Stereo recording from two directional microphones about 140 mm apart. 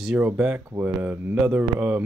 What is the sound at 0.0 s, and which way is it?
Speech, 10° right (ahead or behind).